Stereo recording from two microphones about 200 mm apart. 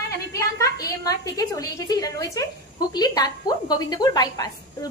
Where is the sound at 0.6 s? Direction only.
15° left (ahead or behind).